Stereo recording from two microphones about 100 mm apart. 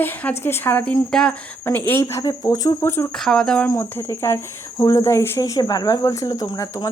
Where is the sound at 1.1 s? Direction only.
5° left (ahead or behind).